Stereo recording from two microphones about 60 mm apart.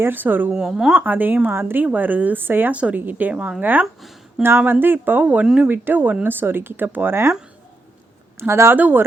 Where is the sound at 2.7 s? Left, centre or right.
Right.